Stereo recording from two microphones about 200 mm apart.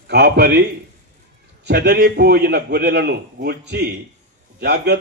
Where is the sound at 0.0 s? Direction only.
55° right (ahead or behind).